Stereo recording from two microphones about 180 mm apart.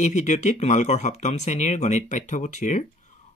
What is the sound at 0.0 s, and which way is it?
Speech, 40° left (ahead or behind).